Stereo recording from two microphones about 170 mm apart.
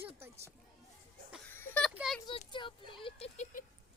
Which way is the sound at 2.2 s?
30° left (ahead or behind).